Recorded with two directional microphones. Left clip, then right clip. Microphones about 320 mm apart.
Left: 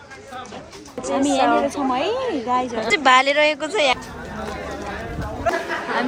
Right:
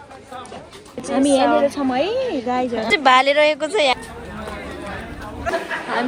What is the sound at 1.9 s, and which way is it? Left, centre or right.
Speech, right.